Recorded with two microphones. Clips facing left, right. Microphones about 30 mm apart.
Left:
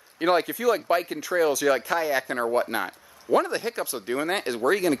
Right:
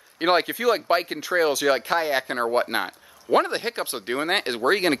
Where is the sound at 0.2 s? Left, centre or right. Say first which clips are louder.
Right 1 dB; right.